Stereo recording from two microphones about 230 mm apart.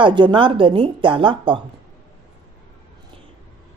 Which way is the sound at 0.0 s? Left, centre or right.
Centre.